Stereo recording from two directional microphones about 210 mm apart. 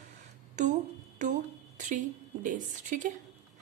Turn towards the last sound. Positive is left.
turn(degrees=-40)  # may be behind; listen again after turning